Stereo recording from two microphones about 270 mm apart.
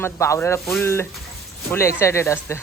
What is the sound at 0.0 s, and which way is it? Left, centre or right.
Speech, centre.